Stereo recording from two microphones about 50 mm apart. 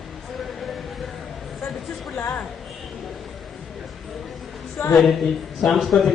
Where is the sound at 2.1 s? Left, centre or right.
Left.